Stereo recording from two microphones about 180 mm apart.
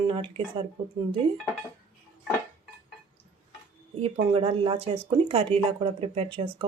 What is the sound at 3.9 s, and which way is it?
Speech, 35° right (ahead or behind).